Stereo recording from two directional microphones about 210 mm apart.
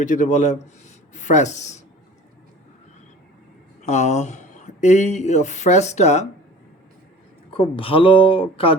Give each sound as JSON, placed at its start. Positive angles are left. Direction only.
{"t": 0.0, "sound": "speech", "side_deg": 35}
{"t": 3.8, "sound": "speech", "side_deg": 35}
{"t": 7.5, "sound": "speech", "side_deg": 25}